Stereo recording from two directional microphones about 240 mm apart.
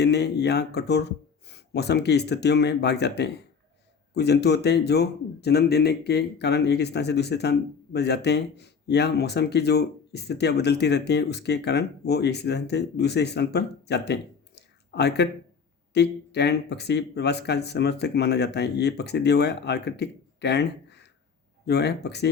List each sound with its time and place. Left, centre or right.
0.0 s speech: left